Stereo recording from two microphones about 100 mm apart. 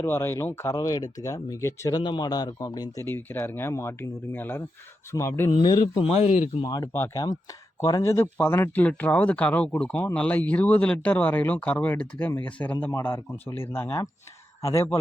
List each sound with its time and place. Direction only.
0.0 s speech: 25° left (ahead or behind)
2.0 s a man's voice: 45° left (ahead or behind)
3.0 s speech: 20° left (ahead or behind)
6.0 s speech: 75° left (ahead or behind)
6.6 s a man's voice: 45° left (ahead or behind)
6.8 s speech: 25° left (ahead or behind)
8.1 s speech: 20° left (ahead or behind)
12.9 s speech: 30° left (ahead or behind)